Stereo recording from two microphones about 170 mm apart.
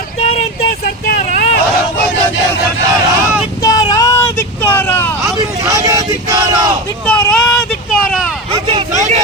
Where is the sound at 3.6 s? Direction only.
25° left (ahead or behind).